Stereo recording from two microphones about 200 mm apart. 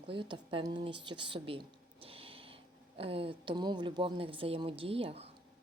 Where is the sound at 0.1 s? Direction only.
25° right (ahead or behind).